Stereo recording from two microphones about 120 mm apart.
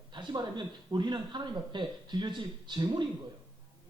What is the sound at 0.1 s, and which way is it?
A man's voice, 40° right (ahead or behind).